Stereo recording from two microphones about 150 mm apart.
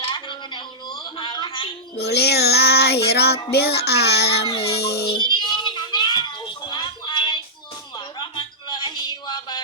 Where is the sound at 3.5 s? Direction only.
90° left.